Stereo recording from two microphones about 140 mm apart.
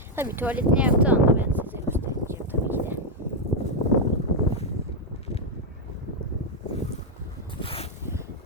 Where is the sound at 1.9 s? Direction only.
15° right (ahead or behind).